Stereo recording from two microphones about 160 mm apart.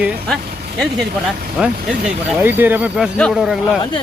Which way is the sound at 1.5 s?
5° right (ahead or behind).